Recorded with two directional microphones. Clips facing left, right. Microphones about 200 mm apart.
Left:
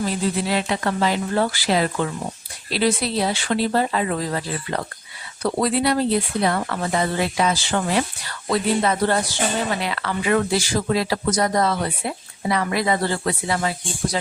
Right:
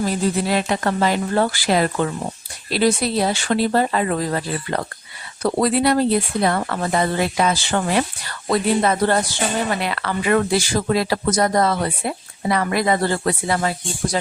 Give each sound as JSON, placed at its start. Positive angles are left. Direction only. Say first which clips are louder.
{"t": 0.0, "sound": "a woman's voice", "louder": "right 2 dB", "side_deg": -45}